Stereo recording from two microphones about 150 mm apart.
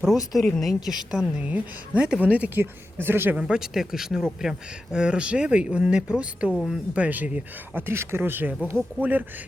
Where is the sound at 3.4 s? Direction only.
5° right (ahead or behind).